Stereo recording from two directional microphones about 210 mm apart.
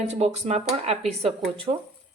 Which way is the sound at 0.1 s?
30° right (ahead or behind).